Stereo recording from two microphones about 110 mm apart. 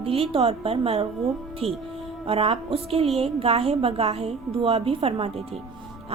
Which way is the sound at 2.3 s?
60° right (ahead or behind).